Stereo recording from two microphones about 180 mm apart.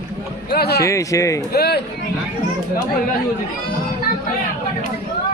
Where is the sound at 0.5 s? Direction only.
65° left (ahead or behind).